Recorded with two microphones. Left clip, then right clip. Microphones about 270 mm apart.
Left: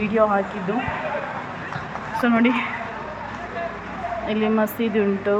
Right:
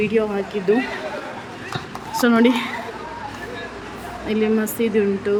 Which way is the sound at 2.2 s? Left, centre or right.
Centre.